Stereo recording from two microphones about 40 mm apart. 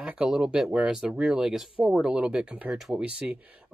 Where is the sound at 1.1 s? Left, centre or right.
Right.